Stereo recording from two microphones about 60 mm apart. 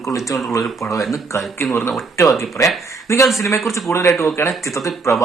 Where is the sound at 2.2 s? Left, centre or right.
Left.